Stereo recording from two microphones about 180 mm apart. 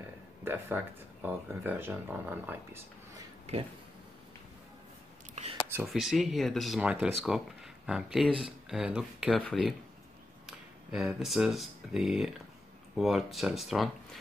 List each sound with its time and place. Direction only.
0.4 s speech: 10° right (ahead or behind)
5.4 s a sound: 40° right (ahead or behind)
5.9 s speech: centre (ahead or behind)